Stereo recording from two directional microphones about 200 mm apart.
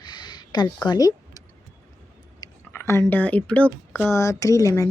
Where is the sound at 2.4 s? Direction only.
15° left (ahead or behind).